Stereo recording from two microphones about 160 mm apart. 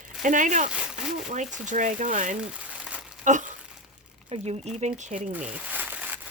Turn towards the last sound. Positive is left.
turn(degrees=-10)  # may be behind; listen again after turning